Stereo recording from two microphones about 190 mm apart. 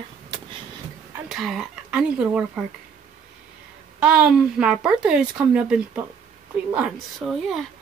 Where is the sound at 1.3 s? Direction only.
Centre (ahead or behind).